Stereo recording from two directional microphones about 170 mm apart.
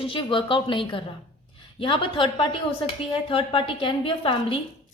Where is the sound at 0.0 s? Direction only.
30° left (ahead or behind).